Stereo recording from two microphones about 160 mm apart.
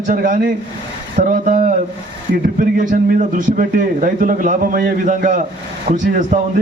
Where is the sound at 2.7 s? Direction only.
55° right (ahead or behind).